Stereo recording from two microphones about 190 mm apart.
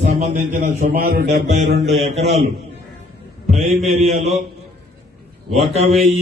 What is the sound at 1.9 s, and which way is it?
Music, 35° right (ahead or behind).